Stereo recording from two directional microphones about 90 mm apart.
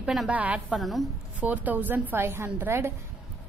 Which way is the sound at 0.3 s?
15° right (ahead or behind).